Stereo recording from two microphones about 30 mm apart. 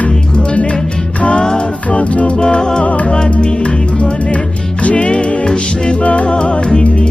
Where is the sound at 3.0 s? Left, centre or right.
Left.